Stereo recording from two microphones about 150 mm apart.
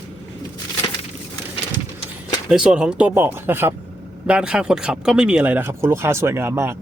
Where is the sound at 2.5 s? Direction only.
5° right (ahead or behind).